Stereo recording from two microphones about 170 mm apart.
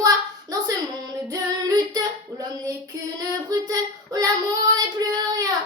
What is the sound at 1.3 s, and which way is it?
Music, 20° right (ahead or behind).